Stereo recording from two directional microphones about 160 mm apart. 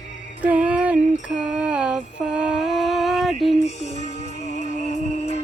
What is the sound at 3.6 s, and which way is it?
Music, 45° left (ahead or behind).